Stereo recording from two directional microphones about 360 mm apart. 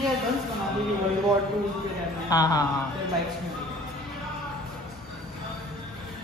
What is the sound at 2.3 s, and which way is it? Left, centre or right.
Speech, centre.